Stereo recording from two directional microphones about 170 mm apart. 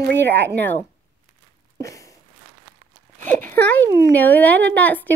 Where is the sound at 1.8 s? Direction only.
20° left (ahead or behind).